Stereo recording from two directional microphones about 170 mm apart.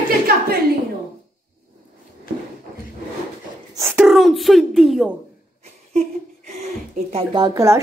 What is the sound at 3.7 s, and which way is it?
Speech, 10° right (ahead or behind).